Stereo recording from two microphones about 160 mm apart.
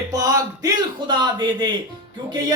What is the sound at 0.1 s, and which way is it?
Speech, 20° right (ahead or behind).